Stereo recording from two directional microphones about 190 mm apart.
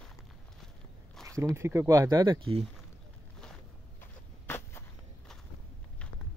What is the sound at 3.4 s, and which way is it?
Walk, 5° left (ahead or behind).